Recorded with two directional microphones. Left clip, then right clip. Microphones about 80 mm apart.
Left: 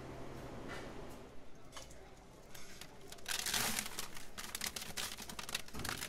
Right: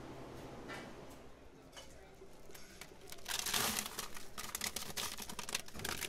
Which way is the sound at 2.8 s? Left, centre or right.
Centre.